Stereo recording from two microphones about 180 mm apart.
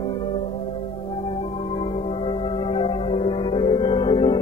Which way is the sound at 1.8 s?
25° left (ahead or behind).